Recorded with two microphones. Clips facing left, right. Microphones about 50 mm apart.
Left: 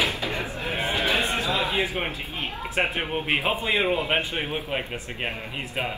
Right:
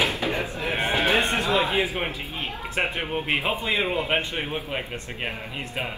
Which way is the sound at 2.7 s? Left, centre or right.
Centre.